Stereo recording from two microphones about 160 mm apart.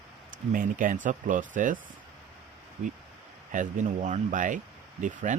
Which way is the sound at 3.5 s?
50° right (ahead or behind).